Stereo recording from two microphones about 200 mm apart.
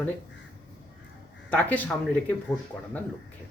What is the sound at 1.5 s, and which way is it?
Speech, 10° left (ahead or behind).